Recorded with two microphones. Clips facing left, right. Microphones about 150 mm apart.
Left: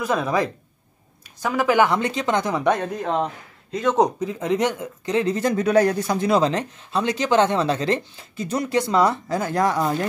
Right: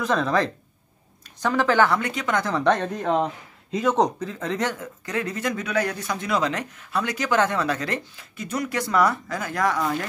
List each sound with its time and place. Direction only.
0.0 s speech: 10° left (ahead or behind)
2.0 s speech: 25° left (ahead or behind); by 4.0 s 5° right (ahead or behind)
4.0 s speech: 15° left (ahead or behind)